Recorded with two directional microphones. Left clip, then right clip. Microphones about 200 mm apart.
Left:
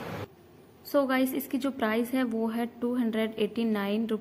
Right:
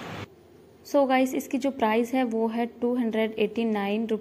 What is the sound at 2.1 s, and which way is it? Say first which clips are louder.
Speech: right 4 dB; 35° left (ahead or behind).